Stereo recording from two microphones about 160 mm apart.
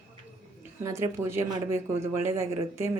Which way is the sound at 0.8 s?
15° right (ahead or behind).